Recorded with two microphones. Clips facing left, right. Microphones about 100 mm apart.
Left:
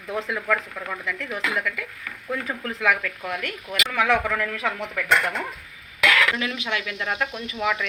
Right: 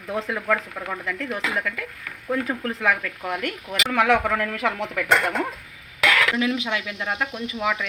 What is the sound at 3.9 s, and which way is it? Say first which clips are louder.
Speech: right 3 dB; 55° right (ahead or behind).